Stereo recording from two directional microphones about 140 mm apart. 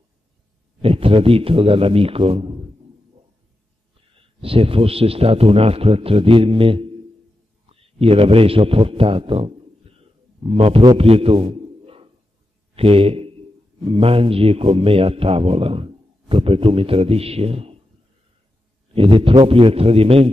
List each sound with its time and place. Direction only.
0.8 s a man's voice: 45° right (ahead or behind)
4.4 s a man's voice: 40° right (ahead or behind)
18.9 s a man's voice: 40° right (ahead or behind)